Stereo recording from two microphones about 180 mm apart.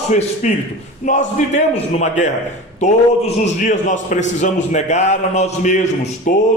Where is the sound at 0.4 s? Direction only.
40° left (ahead or behind).